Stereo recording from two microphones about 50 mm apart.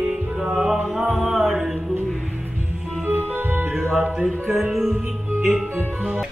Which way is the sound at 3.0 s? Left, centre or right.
Right.